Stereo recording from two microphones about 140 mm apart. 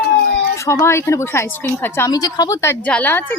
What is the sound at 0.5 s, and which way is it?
Speech, 20° left (ahead or behind).